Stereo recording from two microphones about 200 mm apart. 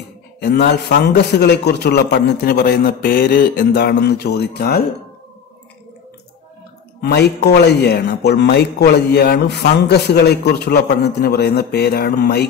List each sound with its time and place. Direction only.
0.4 s a man's voice: 55° left (ahead or behind)
7.0 s speech: 55° left (ahead or behind)